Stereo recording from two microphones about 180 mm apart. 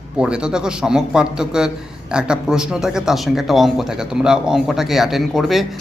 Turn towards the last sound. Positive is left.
turn(degrees=0)  # may be behind; listen again after turning